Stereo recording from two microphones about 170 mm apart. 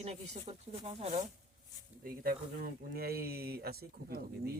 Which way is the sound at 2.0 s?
60° right (ahead or behind).